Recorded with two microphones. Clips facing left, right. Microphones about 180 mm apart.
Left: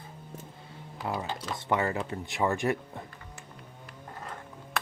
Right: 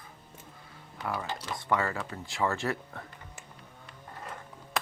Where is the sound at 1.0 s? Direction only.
25° left (ahead or behind).